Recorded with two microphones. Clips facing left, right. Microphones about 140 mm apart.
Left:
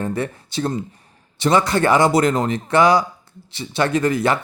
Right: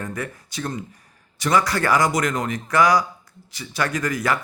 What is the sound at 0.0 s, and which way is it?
Speech, 30° left (ahead or behind).